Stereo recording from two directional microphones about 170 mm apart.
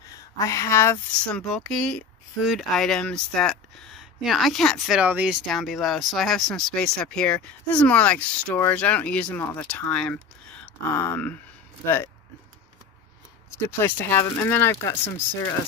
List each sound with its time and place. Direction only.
0.1 s speech: 20° left (ahead or behind)
1.3 s speech: centre (ahead or behind)
13.6 s speech: 15° left (ahead or behind)